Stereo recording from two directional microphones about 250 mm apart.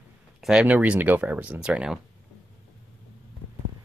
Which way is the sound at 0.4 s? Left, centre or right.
Centre.